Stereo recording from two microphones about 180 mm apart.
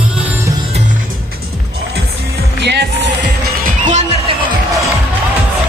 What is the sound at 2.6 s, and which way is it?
Music, 70° right (ahead or behind).